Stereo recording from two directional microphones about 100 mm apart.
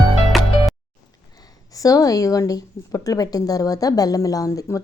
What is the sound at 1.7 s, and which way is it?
Speech, 35° left (ahead or behind).